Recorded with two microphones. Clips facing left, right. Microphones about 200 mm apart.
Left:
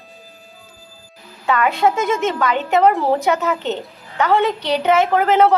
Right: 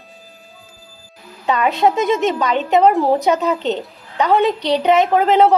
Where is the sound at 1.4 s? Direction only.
20° right (ahead or behind).